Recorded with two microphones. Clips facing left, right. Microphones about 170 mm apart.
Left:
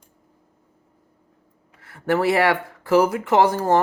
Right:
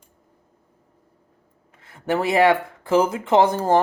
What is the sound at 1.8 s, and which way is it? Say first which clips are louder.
Speech: left 2 dB; 20° right (ahead or behind).